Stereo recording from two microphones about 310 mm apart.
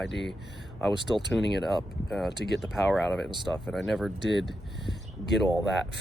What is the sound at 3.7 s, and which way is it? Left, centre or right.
Speech, centre.